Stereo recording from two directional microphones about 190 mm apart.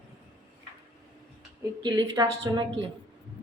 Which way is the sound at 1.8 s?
25° right (ahead or behind).